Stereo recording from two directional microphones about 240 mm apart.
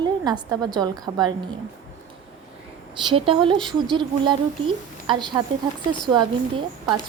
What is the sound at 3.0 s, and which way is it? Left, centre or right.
Speech, right.